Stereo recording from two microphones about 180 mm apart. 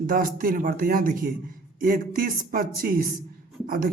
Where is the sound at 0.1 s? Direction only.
50° right (ahead or behind).